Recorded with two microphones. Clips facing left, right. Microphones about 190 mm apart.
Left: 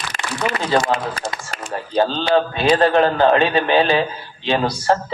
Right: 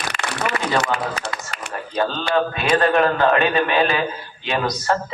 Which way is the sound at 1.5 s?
40° left (ahead or behind).